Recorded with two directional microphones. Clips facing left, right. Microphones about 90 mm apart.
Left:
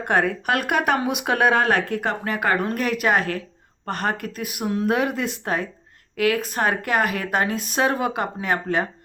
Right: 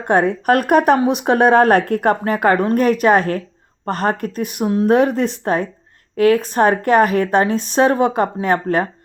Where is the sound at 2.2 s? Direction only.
40° right (ahead or behind).